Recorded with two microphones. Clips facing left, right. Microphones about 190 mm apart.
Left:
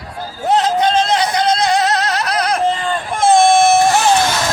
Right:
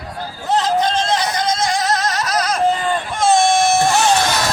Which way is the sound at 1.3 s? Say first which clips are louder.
Left 4 dB; 65° left (ahead or behind).